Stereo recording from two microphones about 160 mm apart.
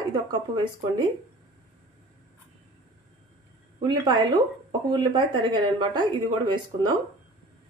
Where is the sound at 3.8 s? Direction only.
25° right (ahead or behind).